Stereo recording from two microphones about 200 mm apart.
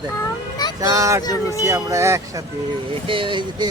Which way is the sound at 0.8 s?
15° right (ahead or behind).